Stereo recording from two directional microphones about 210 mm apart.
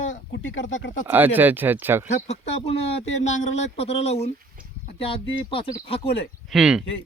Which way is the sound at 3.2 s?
35° left (ahead or behind).